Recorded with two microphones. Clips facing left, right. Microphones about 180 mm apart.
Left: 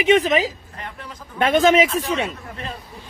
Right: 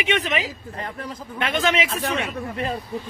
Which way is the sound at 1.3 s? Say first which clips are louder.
Left 7 dB; 45° left (ahead or behind).